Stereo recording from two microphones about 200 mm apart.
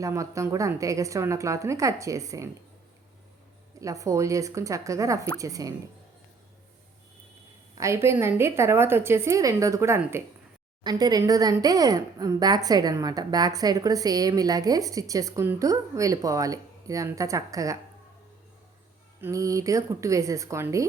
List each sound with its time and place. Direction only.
0.0 s a woman's voice: 15° right (ahead or behind)
3.8 s a woman's voice: 15° right (ahead or behind)
7.8 s a woman's voice: 15° right (ahead or behind)
19.2 s a woman's voice: 15° right (ahead or behind)